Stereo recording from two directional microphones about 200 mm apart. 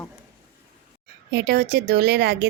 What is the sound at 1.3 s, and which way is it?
Speech, 55° right (ahead or behind).